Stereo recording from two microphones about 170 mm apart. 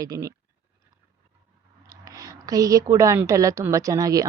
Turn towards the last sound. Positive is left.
turn(degrees=-20)  # may be behind; listen again after turning